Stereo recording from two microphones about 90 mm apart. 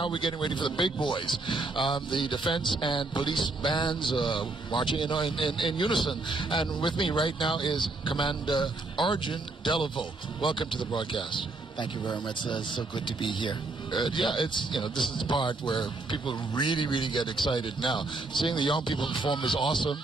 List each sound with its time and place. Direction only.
0.0 s speech: 65° left (ahead or behind)